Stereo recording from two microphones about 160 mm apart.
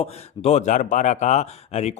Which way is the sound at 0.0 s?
40° left (ahead or behind).